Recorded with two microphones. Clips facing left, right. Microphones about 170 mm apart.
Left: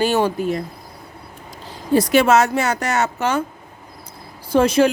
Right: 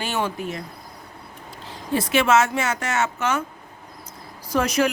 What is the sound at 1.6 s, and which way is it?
Speech, 40° left (ahead or behind).